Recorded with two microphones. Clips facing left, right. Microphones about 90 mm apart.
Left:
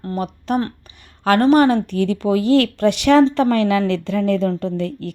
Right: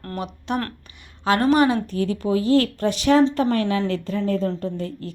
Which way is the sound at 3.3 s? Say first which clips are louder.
Left 5 dB; 90° left.